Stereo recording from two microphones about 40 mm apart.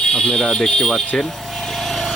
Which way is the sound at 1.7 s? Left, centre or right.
Centre.